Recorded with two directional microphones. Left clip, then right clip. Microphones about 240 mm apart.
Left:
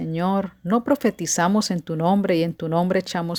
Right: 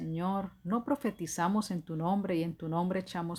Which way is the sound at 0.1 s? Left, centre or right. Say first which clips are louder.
Left 11 dB; left.